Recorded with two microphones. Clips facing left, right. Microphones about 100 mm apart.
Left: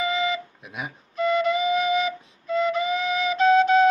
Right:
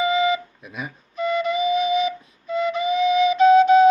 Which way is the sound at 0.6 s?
15° left (ahead or behind).